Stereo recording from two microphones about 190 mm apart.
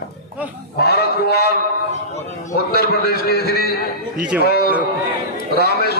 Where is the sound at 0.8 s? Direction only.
60° left (ahead or behind).